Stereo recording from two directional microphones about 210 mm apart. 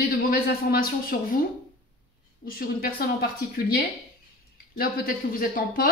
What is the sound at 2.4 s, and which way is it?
Speech, 45° left (ahead or behind).